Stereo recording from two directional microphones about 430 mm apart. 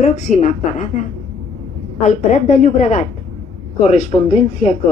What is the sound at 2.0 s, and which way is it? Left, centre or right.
A woman's voice, centre.